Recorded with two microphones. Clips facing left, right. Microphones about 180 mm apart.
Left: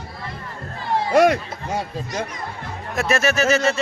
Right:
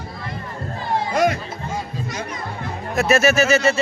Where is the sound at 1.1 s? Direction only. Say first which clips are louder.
Left 6 dB; 65° left (ahead or behind).